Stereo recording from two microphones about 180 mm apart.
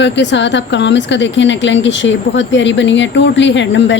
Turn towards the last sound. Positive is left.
turn(degrees=90)